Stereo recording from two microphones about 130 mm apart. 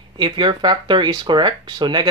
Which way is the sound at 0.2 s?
40° right (ahead or behind).